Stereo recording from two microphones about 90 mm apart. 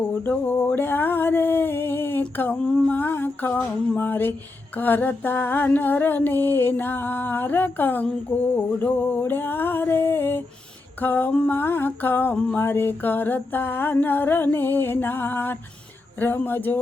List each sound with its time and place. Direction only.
0.2 s female singing: 20° left (ahead or behind)